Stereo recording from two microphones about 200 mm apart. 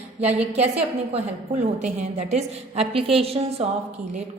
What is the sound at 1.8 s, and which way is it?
A woman's voice, 35° right (ahead or behind).